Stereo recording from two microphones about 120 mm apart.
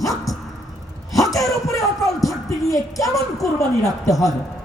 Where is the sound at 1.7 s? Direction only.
30° left (ahead or behind).